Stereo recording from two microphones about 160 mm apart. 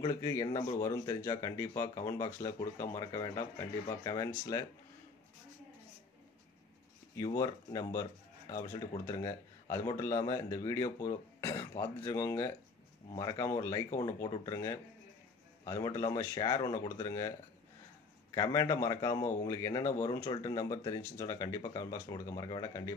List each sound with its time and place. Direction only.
0.0 s speech: 20° left (ahead or behind)
7.3 s speech: 20° left (ahead or behind)
18.3 s speech: 20° left (ahead or behind)